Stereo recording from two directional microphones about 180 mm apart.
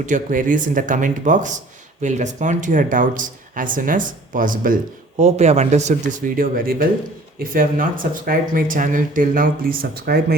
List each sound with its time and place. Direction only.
0.0 s speech: 45° right (ahead or behind)